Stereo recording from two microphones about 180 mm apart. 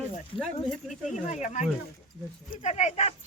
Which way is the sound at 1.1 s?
40° left (ahead or behind).